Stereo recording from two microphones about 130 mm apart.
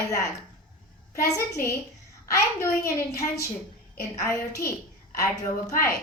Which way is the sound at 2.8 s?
25° left (ahead or behind).